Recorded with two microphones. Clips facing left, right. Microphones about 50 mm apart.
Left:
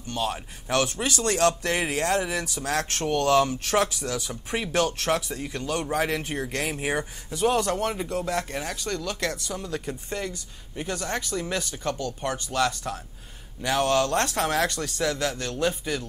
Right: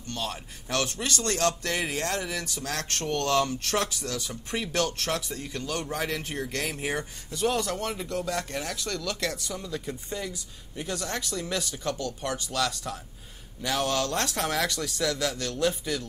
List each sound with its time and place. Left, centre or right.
0.1 s speech: left
10.8 s speech: left
14.1 s speech: left